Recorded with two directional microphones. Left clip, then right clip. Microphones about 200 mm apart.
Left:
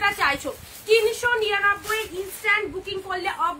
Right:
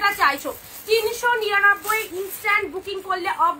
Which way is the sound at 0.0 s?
15° left (ahead or behind).